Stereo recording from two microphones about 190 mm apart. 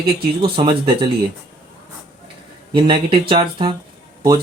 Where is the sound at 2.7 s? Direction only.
25° right (ahead or behind).